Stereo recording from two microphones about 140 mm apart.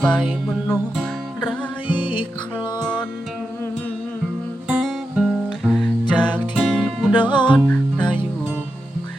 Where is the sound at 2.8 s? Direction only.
5° left (ahead or behind).